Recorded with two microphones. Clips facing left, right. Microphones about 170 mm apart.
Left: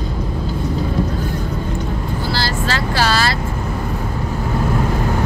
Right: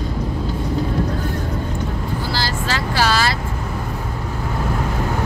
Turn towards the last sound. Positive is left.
turn(degrees=-15)  # may be behind; listen again after turning